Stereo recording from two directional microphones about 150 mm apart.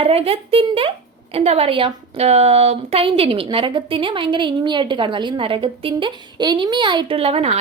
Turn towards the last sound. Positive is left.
turn(degrees=-40)  # may be behind; listen again after turning